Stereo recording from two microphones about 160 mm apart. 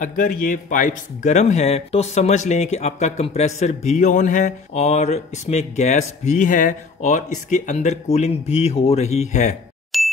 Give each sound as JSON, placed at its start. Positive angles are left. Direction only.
{"t": 0.0, "sound": "speech", "side_deg": 55}
{"t": 9.9, "sound": "ding", "side_deg": 0}